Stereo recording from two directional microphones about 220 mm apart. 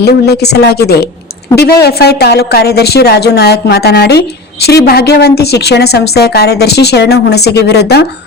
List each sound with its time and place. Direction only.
0.0 s a woman's voice: 50° left (ahead or behind)